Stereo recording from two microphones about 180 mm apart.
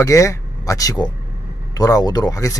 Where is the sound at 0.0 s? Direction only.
20° left (ahead or behind).